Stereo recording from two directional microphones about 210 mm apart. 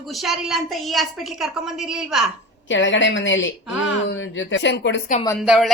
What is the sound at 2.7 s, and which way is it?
A woman's voice, 60° left (ahead or behind).